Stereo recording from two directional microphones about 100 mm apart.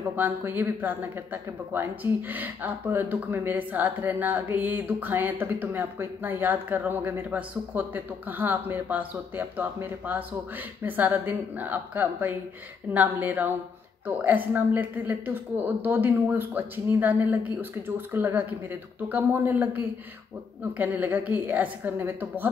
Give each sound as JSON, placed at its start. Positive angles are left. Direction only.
{"t": 0.1, "sound": "a woman's voice", "side_deg": -20}